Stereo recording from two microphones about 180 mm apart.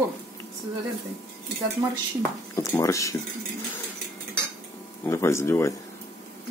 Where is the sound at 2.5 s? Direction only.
20° left (ahead or behind).